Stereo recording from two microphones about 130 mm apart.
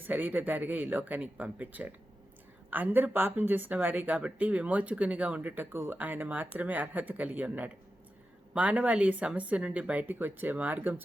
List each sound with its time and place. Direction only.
0.0 s speech: 15° right (ahead or behind)